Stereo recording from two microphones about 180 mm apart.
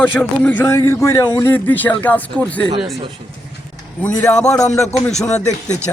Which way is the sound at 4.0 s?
10° left (ahead or behind).